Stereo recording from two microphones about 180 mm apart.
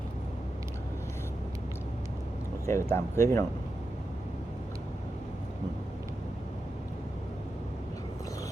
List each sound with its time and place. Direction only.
2.6 s speech: 15° left (ahead or behind)